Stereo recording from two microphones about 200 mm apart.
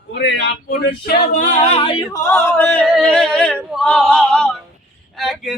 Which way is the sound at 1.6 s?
30° left (ahead or behind).